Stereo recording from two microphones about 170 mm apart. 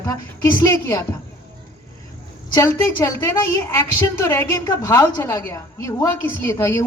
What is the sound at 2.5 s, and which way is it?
A woman's voice, 15° left (ahead or behind).